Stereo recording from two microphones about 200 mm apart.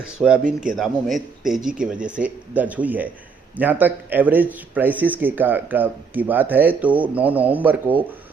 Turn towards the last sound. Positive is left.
turn(degrees=-10)  # may be behind; listen again after turning